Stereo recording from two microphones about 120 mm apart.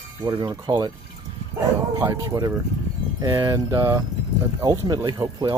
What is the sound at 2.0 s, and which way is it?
Speech, 30° right (ahead or behind).